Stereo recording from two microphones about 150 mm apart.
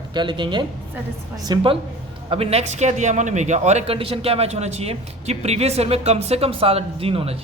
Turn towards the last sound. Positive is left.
turn(degrees=-40)  # may be behind; listen again after turning